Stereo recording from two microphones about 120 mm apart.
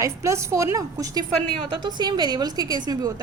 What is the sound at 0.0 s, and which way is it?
A woman's voice, 25° right (ahead or behind).